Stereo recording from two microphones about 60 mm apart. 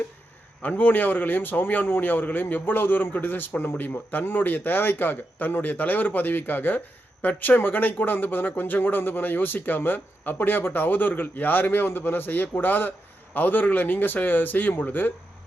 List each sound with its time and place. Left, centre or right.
0.7 s a man's voice: left